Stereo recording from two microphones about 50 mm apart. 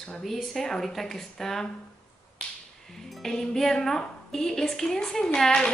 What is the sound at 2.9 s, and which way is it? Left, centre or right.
A woman's voice, centre.